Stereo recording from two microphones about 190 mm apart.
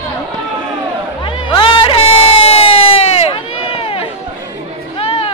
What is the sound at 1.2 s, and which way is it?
Music, 25° left (ahead or behind).